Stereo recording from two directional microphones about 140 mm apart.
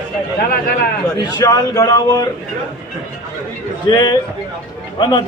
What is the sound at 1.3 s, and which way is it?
Speech, 25° left (ahead or behind).